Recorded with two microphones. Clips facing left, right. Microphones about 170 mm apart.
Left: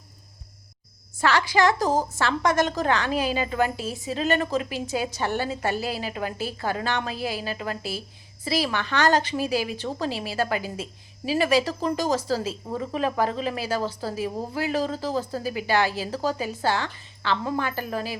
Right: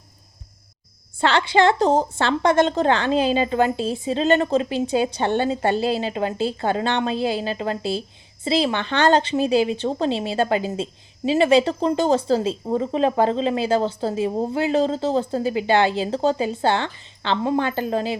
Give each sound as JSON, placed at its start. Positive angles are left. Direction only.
{"t": 1.2, "sound": "speech", "side_deg": -30}